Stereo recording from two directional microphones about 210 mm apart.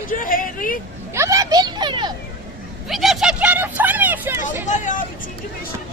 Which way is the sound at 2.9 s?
Centre (ahead or behind).